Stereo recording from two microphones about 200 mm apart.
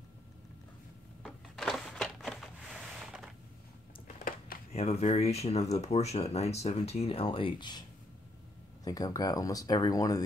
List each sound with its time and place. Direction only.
1.2 s crushing: centre (ahead or behind)
4.7 s speech: 30° left (ahead or behind)
8.8 s speech: 20° left (ahead or behind)